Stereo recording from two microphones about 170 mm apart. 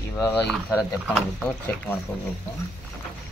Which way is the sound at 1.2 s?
5° left (ahead or behind).